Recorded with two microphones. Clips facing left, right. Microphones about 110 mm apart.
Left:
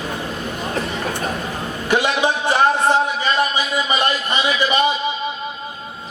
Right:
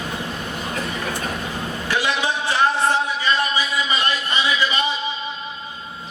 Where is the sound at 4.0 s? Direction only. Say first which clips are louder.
Left 3 dB; 20° left (ahead or behind).